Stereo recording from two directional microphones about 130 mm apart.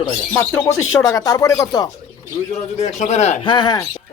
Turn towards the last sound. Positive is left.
turn(degrees=30)  # may be behind; listen again after turning